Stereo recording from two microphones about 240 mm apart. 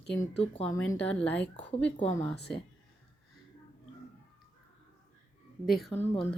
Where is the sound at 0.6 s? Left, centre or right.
Centre.